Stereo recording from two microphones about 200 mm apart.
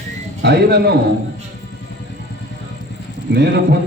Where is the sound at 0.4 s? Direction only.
55° right (ahead or behind).